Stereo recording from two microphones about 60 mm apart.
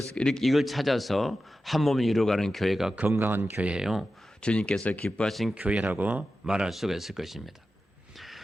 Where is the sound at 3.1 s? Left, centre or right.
Right.